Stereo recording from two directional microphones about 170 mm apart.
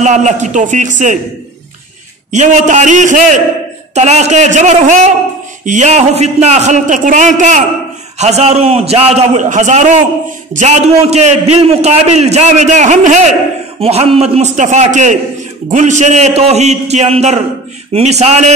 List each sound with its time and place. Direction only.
0.0 s a man's voice: 45° right (ahead or behind)
2.3 s a man's voice: 45° right (ahead or behind)
13.7 s a man's voice: 35° right (ahead or behind)